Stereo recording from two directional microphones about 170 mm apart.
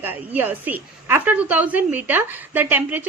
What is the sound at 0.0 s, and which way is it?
A woman's voice, 10° right (ahead or behind).